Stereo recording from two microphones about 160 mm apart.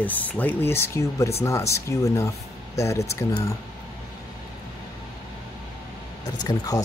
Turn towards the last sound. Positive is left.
turn(degrees=20)  # may be behind; listen again after turning